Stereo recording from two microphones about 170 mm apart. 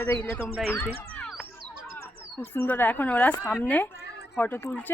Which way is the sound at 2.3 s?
10° left (ahead or behind).